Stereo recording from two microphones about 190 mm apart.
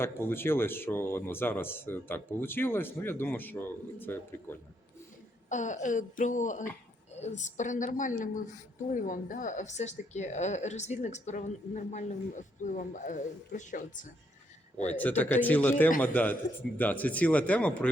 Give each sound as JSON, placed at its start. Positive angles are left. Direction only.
{"t": 0.0, "sound": "speech", "side_deg": 10}
{"t": 5.5, "sound": "speech", "side_deg": 40}
{"t": 14.8, "sound": "speech", "side_deg": 10}